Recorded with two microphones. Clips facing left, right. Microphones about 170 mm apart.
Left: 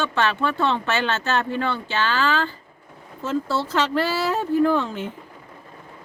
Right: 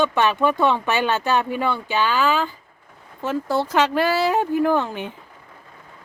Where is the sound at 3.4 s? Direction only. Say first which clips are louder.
Right 3 dB; 15° right (ahead or behind).